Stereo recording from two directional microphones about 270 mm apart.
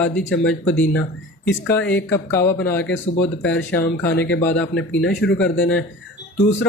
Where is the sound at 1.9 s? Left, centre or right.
Centre.